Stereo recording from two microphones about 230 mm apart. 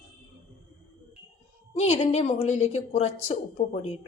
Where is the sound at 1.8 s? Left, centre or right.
Left.